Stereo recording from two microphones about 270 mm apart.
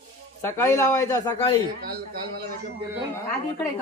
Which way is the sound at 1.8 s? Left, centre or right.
Right.